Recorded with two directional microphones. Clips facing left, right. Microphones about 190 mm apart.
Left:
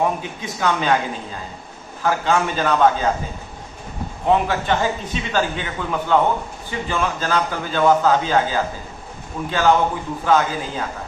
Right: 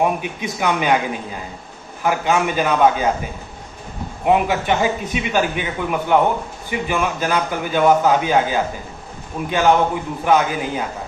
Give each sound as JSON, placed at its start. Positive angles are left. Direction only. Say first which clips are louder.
{"t": 0.0, "sound": "a man's voice", "louder": "right 2 dB", "side_deg": -15}
{"t": 4.3, "sound": "a man's voice", "louder": "right 2 dB", "side_deg": -15}